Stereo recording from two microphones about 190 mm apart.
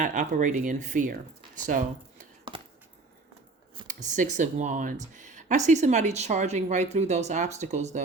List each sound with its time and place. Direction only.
0.0 s speech: 40° right (ahead or behind)
3.8 s speech: 40° right (ahead or behind)